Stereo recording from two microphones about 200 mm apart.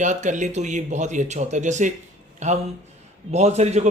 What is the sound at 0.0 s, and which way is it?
Speech, 35° right (ahead or behind).